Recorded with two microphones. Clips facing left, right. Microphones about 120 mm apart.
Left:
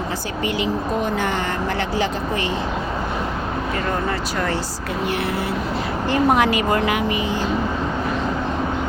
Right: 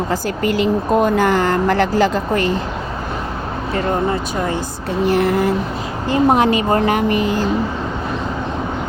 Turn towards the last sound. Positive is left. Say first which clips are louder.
# right 4 dB
turn(degrees=-40)  # may be behind; listen again after turning